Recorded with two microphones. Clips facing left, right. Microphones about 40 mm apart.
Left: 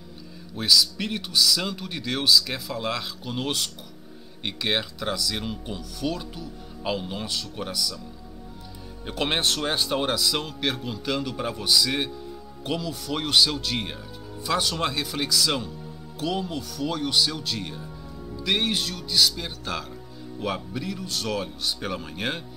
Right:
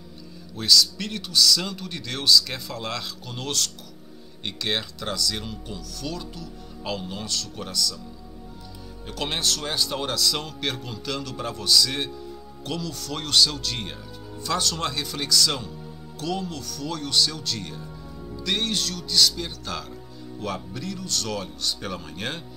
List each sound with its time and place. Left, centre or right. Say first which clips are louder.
0.6 s speech: right 1 dB; centre
9.0 s speech: left 3 dB; left